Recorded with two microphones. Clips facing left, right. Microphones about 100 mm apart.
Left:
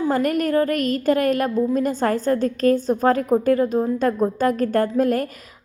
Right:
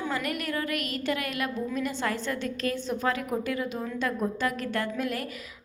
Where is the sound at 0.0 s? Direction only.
40° left (ahead or behind).